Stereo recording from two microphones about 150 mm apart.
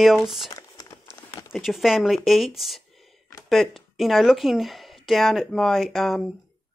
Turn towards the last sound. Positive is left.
turn(degrees=0)  # may be behind; listen again after turning